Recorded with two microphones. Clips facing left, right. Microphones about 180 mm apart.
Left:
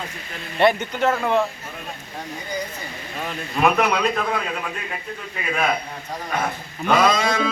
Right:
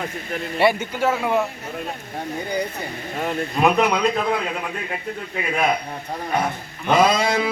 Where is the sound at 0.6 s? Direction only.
10° right (ahead or behind).